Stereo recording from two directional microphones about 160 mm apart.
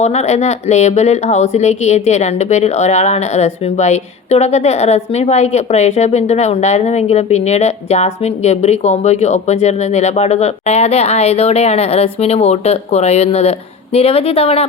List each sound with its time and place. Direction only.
0.0 s speech: 45° left (ahead or behind)